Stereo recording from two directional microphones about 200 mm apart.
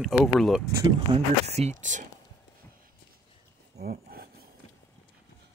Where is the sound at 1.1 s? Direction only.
20° right (ahead or behind).